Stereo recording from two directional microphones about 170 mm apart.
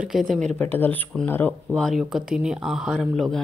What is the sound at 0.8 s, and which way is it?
Speech, 10° left (ahead or behind).